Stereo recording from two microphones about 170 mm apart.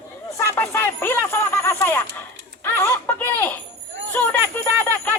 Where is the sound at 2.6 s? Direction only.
15° left (ahead or behind).